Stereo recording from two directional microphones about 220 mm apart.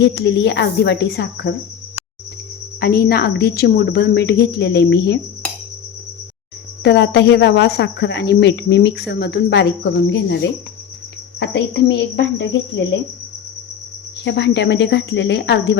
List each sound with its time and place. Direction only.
0.0 s speech: 50° left (ahead or behind)
2.8 s speech: 45° left (ahead or behind)
6.8 s speech: 50° left (ahead or behind)
14.3 s speech: 50° left (ahead or behind)